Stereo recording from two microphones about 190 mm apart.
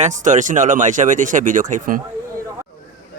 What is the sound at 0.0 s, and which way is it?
Speech, 40° right (ahead or behind).